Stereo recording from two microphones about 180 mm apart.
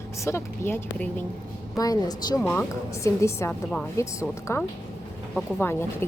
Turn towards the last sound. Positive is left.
turn(degrees=10)  # may be behind; listen again after turning